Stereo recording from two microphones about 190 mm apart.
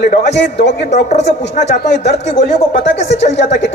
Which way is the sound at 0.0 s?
60° left (ahead or behind).